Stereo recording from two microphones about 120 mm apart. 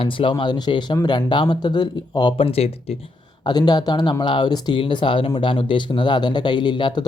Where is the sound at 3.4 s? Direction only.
35° left (ahead or behind).